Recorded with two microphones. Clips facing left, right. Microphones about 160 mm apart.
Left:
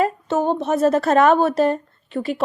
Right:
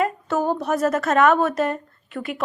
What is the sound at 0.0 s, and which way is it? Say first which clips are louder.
A woman's voice: left 2 dB; 25° left (ahead or behind).